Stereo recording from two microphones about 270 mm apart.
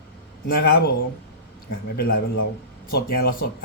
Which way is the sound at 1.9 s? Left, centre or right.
Left.